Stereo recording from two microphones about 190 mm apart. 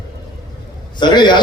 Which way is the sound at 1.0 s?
25° left (ahead or behind).